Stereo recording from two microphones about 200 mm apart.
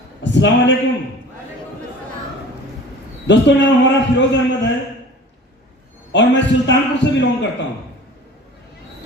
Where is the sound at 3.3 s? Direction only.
65° left (ahead or behind).